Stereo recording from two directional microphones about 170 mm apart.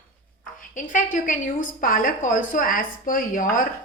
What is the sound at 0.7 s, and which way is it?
A woman's voice, 50° left (ahead or behind).